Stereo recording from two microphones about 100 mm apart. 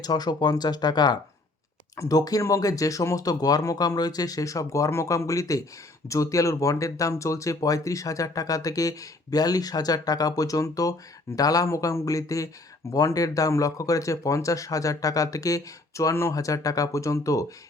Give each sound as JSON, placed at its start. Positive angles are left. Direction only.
{"t": 0.0, "sound": "speech", "side_deg": 40}